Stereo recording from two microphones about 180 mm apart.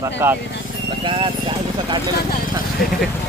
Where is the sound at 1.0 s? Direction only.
30° right (ahead or behind).